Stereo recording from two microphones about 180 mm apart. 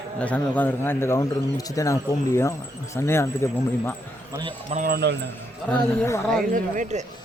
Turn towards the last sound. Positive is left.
turn(degrees=-45)  # may be behind; listen again after turning